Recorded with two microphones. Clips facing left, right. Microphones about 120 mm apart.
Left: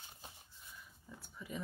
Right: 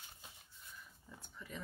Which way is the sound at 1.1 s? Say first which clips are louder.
Left 4 dB; 10° left (ahead or behind).